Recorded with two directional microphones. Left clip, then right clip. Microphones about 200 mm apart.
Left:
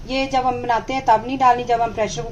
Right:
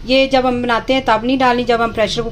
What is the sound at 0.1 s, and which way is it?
A woman's voice, 40° right (ahead or behind).